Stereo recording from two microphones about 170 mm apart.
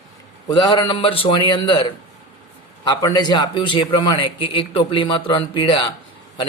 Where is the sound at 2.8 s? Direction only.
25° left (ahead or behind).